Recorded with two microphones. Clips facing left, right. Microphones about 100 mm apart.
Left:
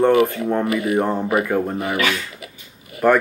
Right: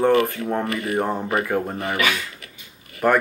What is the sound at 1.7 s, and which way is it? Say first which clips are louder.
Speech: left 3 dB; 15° left (ahead or behind).